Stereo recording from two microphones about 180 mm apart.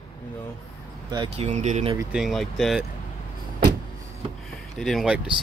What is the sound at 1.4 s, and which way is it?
Speech, 40° right (ahead or behind).